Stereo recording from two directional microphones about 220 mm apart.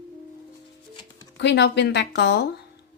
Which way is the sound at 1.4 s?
50° left (ahead or behind).